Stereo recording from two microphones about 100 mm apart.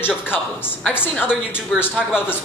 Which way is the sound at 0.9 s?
20° left (ahead or behind).